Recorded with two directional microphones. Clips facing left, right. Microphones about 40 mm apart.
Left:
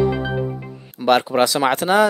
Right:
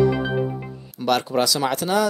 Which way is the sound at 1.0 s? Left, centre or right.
Left.